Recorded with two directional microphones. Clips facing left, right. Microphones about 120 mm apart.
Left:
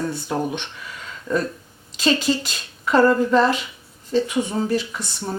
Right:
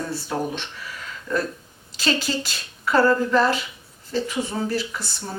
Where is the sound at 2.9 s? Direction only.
20° left (ahead or behind).